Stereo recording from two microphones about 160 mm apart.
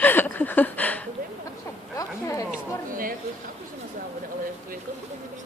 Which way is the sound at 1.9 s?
20° left (ahead or behind).